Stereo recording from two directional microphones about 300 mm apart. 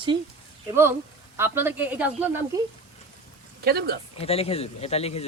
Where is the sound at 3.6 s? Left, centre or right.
Right.